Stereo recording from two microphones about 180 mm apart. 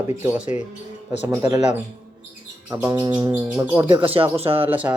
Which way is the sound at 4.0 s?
30° right (ahead or behind).